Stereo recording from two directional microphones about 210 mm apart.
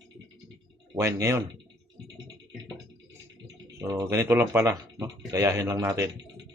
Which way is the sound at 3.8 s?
15° right (ahead or behind).